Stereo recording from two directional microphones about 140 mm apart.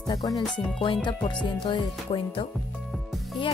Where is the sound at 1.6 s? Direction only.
40° left (ahead or behind).